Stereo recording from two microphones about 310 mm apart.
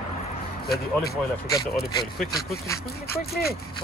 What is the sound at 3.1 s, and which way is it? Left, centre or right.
Speech, left.